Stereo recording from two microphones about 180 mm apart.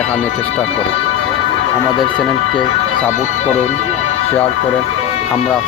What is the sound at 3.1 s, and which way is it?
Speech, 40° left (ahead or behind).